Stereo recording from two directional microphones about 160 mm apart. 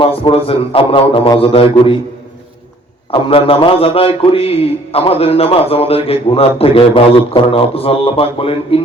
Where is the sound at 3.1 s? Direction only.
35° left (ahead or behind).